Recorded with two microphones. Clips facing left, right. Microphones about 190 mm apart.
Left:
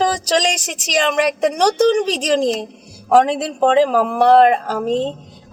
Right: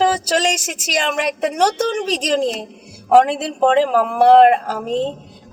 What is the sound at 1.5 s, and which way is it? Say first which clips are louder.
A woman's voice: left 4 dB; 45° left (ahead or behind).